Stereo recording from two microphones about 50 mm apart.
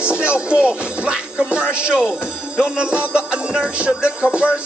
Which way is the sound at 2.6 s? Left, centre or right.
Centre.